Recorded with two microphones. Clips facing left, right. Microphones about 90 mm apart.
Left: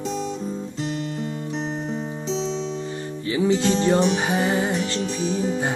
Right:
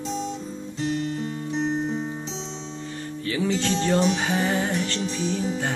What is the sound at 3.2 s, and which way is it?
Music, 20° left (ahead or behind).